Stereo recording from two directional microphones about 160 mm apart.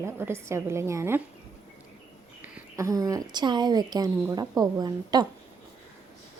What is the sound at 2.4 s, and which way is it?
A woman's voice, 20° right (ahead or behind).